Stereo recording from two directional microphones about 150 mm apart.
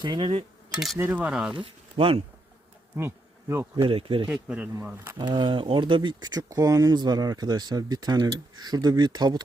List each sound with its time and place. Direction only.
0.0 s speech: 30° right (ahead or behind)
0.7 s speech: centre (ahead or behind)
1.5 s speech: 40° right (ahead or behind)
3.5 s speech: 20° right (ahead or behind)
3.8 s speech: 40° right (ahead or behind)
4.4 s speech: 10° right (ahead or behind)
5.1 s speech: 30° right (ahead or behind)